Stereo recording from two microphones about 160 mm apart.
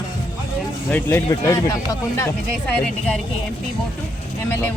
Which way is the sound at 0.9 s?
10° left (ahead or behind).